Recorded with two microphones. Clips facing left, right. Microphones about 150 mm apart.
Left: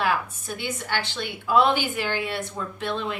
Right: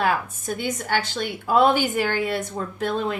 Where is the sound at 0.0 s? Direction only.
45° right (ahead or behind).